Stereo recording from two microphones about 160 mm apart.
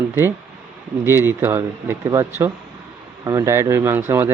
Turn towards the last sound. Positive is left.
turn(degrees=-15)  # may be behind; listen again after turning